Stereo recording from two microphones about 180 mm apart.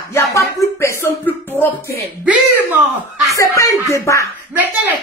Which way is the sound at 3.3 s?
15° left (ahead or behind).